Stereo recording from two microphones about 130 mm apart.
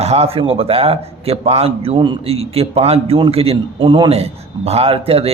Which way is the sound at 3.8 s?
35° right (ahead or behind).